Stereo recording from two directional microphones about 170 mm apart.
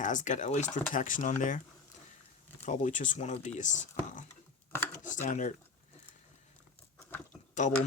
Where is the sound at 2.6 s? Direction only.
45° left (ahead or behind).